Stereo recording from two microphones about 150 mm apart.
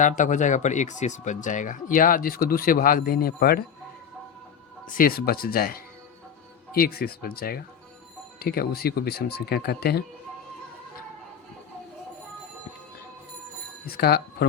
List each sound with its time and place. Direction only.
0.0 s speech: 55° left (ahead or behind); by 3.6 s 90° left
4.9 s speech: 70° left (ahead or behind); by 10.0 s 90° left
13.8 s speech: 90° left